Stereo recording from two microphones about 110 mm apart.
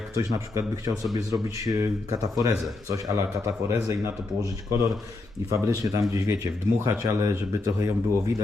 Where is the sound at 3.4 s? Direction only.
25° right (ahead or behind).